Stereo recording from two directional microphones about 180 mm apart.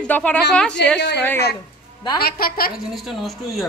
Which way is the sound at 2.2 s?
55° left (ahead or behind).